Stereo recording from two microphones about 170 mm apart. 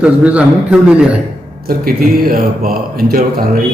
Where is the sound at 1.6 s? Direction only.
60° right (ahead or behind).